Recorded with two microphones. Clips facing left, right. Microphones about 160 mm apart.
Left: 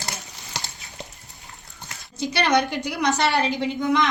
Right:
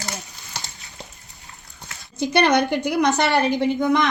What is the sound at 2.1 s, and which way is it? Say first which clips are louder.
A woman's voice: right 3 dB; 50° right (ahead or behind).